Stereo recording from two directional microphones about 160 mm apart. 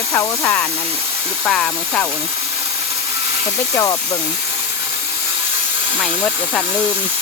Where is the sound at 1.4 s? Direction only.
5° left (ahead or behind).